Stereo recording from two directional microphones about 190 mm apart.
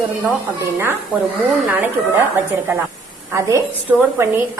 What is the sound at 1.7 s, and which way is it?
Speech, 10° right (ahead or behind).